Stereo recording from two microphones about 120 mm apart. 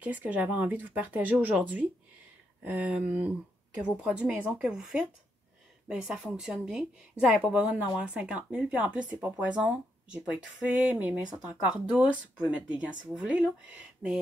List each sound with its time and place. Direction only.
0.0 s a woman's voice: 15° right (ahead or behind)